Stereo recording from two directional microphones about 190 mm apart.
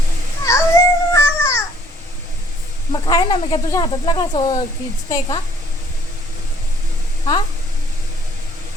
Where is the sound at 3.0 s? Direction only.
20° left (ahead or behind).